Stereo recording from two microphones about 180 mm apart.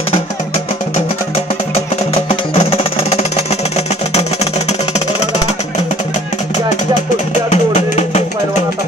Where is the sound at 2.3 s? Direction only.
35° left (ahead or behind).